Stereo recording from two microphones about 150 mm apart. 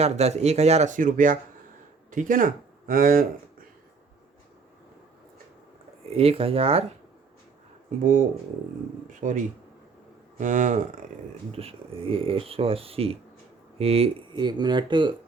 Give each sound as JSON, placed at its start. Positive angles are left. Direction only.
{"t": 0.0, "sound": "speech", "side_deg": -45}
{"t": 6.1, "sound": "speech", "side_deg": -40}
{"t": 9.0, "sound": "speech", "side_deg": -55}
{"t": 11.5, "sound": "speech", "side_deg": -40}